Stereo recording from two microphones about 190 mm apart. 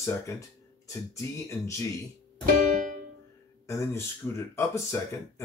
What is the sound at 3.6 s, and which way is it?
Speech, 15° left (ahead or behind).